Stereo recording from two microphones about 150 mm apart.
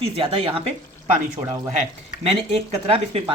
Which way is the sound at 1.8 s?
45° right (ahead or behind).